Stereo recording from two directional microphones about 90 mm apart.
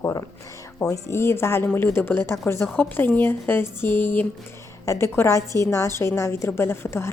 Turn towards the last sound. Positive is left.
turn(degrees=30)  # may be behind; listen again after turning